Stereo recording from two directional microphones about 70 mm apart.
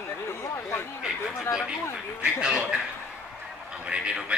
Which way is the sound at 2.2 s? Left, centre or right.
Centre.